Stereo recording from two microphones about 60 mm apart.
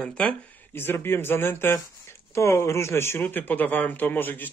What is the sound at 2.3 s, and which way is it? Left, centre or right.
Speech, left.